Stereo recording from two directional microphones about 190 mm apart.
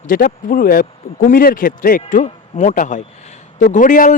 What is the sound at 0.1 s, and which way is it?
Speech, 45° left (ahead or behind).